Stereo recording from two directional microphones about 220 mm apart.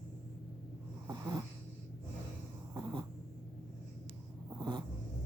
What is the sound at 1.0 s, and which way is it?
Snort, 20° right (ahead or behind).